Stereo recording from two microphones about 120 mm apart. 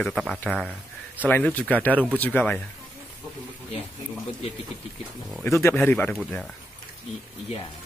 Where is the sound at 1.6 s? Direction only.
10° left (ahead or behind).